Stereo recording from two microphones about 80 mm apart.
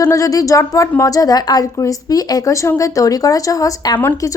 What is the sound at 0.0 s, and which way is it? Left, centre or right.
A woman's voice, left.